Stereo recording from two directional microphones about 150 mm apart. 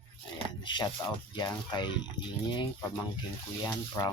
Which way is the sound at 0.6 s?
30° left (ahead or behind).